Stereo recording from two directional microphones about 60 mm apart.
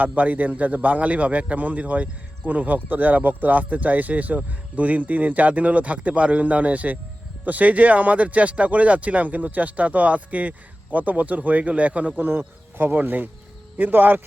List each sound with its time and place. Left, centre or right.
0.2 s a man's voice: right